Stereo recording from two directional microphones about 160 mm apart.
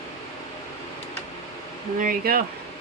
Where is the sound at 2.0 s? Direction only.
65° right (ahead or behind).